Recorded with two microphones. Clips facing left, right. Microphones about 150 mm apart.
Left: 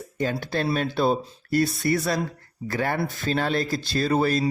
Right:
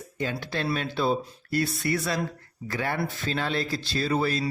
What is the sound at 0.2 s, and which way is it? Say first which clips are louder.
A man's voice: left 4 dB; 40° left (ahead or behind).